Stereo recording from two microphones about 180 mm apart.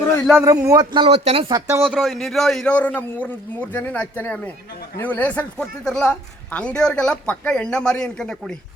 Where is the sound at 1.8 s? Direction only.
Centre (ahead or behind).